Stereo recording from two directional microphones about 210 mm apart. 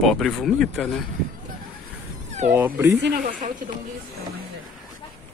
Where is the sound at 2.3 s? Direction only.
35° right (ahead or behind).